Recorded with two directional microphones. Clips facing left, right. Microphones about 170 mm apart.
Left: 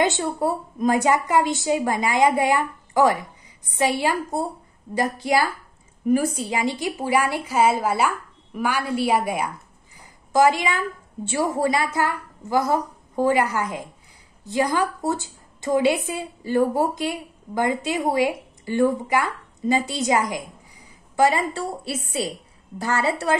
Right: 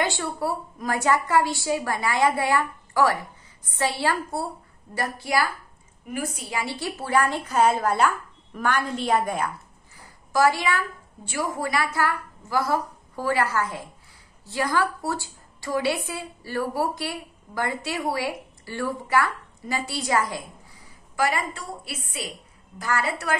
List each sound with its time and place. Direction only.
0.0 s a woman's voice: 20° left (ahead or behind)
6.5 s a woman's voice: 20° left (ahead or behind)